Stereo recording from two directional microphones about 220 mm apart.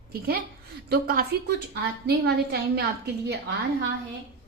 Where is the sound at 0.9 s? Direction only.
45° right (ahead or behind).